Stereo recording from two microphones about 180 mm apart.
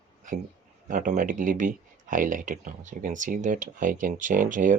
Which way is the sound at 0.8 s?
45° right (ahead or behind).